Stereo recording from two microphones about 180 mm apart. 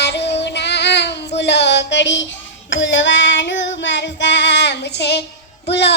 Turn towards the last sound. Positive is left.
turn(degrees=70)  # may be behind; listen again after turning